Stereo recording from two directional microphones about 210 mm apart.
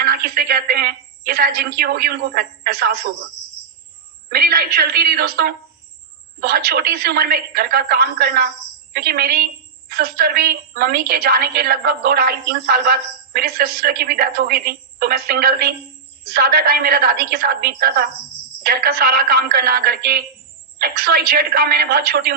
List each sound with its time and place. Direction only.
0.0 s a woman's voice: 45° right (ahead or behind)
4.3 s a woman's voice: 45° right (ahead or behind)